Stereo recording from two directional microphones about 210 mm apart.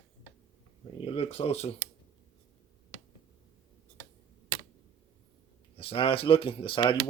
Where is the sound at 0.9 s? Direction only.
25° left (ahead or behind).